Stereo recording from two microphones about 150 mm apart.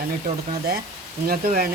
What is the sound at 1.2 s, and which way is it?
Speech, 75° right (ahead or behind).